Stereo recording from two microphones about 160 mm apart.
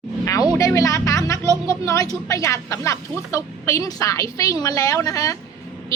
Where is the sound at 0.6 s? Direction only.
20° left (ahead or behind).